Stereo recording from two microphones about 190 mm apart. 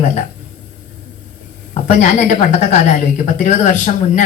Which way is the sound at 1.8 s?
40° left (ahead or behind).